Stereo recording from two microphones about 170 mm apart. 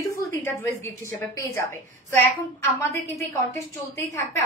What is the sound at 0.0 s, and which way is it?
A woman's voice, 15° left (ahead or behind).